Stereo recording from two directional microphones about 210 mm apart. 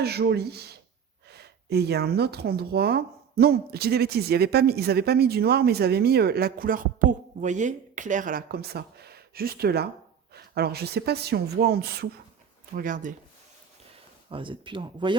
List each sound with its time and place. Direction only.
0.0 s speech: 50° right (ahead or behind)
14.3 s speech: 25° right (ahead or behind)